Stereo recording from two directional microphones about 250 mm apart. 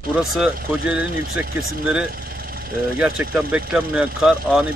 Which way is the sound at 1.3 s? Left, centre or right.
Right.